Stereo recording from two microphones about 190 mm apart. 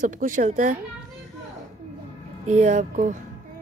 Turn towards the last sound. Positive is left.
turn(degrees=-40)  # may be behind; listen again after turning